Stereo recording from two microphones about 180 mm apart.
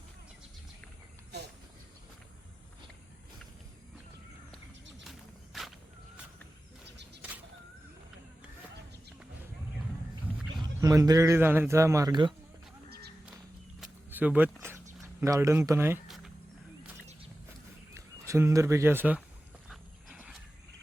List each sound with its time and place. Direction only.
5.5 s a sound: centre (ahead or behind)
10.6 s a man's voice: 20° right (ahead or behind)
12.9 s music: 60° right (ahead or behind)
13.7 s a sound: 5° right (ahead or behind)
15.0 s speech: 15° right (ahead or behind)
16.0 s wild animals: centre (ahead or behind)
17.9 s speech: 15° right (ahead or behind)
19.6 s horse: centre (ahead or behind)